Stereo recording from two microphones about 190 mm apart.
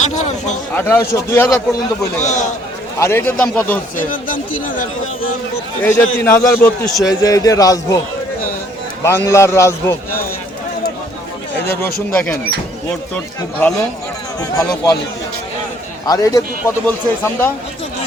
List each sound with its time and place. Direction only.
0.7 s a man's voice: 10° left (ahead or behind)
2.2 s a man's voice: 40° left (ahead or behind)
3.0 s a man's voice: 15° left (ahead or behind)
3.9 s speech: 45° left (ahead or behind)
5.8 s a man's voice: 15° left (ahead or behind)
9.0 s a man's voice: 15° left (ahead or behind)
12.1 s a man's voice: 10° left (ahead or behind)
13.6 s a man's voice: 10° left (ahead or behind)
16.0 s a man's voice: 20° left (ahead or behind)